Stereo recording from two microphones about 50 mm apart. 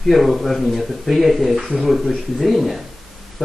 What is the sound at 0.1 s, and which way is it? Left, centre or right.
Speech, centre.